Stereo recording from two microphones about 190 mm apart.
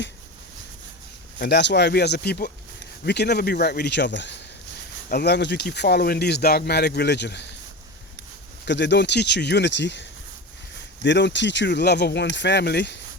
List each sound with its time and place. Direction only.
1.4 s speech: 60° left (ahead or behind)
8.6 s speech: 65° left (ahead or behind)